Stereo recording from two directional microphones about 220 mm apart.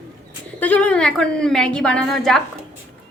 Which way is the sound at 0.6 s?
5° left (ahead or behind).